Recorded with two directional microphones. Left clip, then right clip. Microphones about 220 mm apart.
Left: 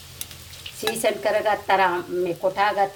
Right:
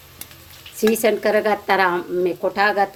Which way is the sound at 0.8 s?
45° right (ahead or behind).